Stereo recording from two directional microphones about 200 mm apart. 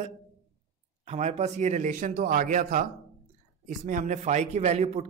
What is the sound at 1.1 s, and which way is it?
Speech, 35° right (ahead or behind).